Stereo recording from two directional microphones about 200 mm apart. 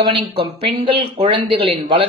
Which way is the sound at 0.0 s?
25° right (ahead or behind).